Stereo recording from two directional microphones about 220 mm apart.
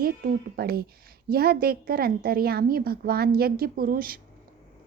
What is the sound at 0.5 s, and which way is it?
Speech, 45° right (ahead or behind).